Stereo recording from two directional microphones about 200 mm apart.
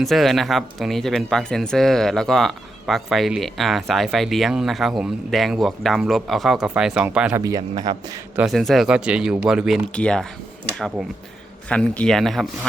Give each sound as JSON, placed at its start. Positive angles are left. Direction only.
{"t": 0.0, "sound": "speech", "side_deg": 0}
{"t": 7.4, "sound": "a man's voice", "side_deg": -20}
{"t": 8.4, "sound": "speech", "side_deg": 0}